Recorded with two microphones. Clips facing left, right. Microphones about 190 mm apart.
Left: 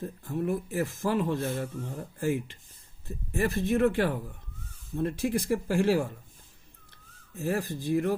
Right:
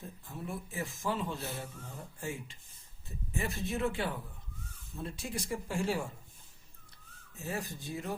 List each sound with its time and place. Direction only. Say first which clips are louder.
0.0 s a man's voice: left 12 dB; 65° left (ahead or behind)
3.3 s speech: left 9 dB; 65° left (ahead or behind); by 6.1 s 90° left
7.3 s a man's voice: left 9 dB; 75° left (ahead or behind)